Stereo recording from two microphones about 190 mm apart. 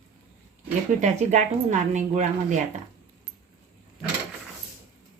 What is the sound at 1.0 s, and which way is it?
A woman's voice, 40° right (ahead or behind).